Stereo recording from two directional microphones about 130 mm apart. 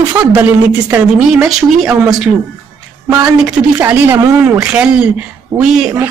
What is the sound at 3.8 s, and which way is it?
A man's voice, 15° right (ahead or behind).